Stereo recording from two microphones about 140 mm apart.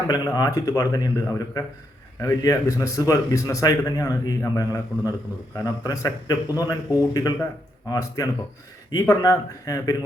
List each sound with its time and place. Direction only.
0.1 s a man's voice: 25° left (ahead or behind)